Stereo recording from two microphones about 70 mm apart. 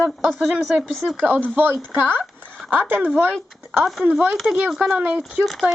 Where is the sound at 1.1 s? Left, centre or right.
Right.